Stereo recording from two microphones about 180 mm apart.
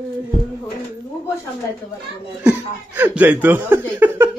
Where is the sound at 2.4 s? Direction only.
10° right (ahead or behind).